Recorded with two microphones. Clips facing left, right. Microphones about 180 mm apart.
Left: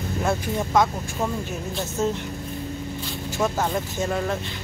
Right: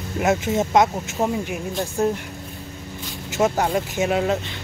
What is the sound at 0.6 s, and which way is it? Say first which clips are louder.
Speech: right 3 dB; 20° right (ahead or behind).